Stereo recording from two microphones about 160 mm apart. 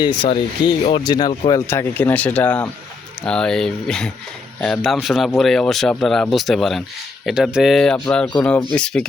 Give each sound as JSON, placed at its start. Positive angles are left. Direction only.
{"t": 0.0, "sound": "speech", "side_deg": 30}